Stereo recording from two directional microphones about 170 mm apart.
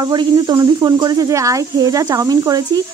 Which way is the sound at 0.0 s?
25° right (ahead or behind).